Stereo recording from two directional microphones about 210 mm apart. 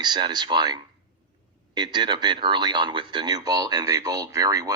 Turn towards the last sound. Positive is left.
turn(degrees=-15)  # may be behind; listen again after turning